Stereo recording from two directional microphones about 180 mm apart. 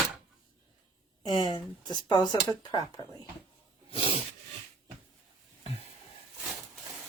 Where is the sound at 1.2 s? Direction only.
25° left (ahead or behind).